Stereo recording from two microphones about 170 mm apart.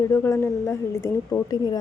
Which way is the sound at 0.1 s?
15° left (ahead or behind).